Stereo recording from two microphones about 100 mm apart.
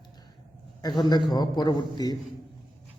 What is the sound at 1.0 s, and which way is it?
A man's voice, 50° left (ahead or behind).